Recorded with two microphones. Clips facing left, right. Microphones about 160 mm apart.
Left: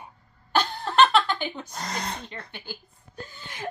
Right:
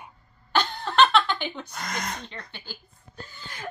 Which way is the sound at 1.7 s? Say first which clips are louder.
Left 2 dB; 30° left (ahead or behind).